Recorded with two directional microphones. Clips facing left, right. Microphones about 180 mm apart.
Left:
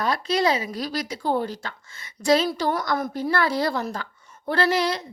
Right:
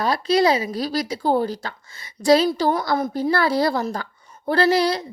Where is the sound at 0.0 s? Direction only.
35° right (ahead or behind).